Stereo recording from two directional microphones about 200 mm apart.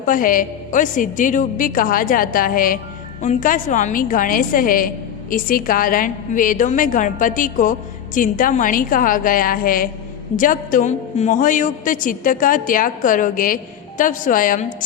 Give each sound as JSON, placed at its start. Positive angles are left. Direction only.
{"t": 0.0, "sound": "a woman's voice", "side_deg": 45}